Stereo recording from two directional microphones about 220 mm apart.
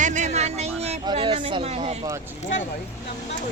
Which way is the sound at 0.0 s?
35° right (ahead or behind).